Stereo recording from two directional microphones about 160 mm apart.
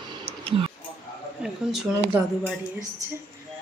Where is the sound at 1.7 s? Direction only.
Centre (ahead or behind).